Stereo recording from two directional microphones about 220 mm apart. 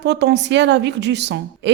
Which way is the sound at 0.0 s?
50° right (ahead or behind).